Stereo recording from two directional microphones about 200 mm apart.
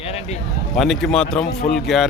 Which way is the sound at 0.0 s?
30° left (ahead or behind).